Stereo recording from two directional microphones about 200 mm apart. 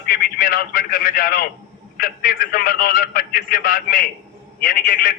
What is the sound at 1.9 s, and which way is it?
A man's voice, 45° left (ahead or behind).